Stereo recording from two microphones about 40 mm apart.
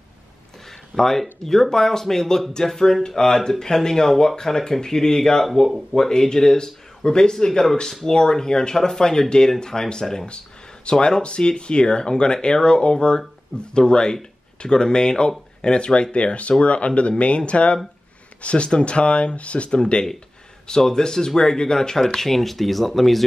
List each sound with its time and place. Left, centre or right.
0.9 s speech: centre
22.0 s speech: centre